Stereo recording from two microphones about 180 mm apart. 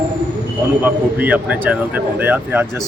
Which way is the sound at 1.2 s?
10° right (ahead or behind).